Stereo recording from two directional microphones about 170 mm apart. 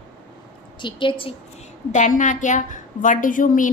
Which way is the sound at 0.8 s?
30° left (ahead or behind).